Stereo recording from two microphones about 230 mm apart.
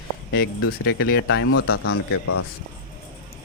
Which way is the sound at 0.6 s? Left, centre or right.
Left.